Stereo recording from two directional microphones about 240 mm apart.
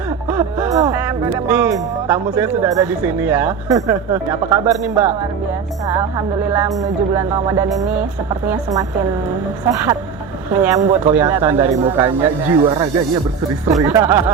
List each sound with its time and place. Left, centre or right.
0.3 s speech: centre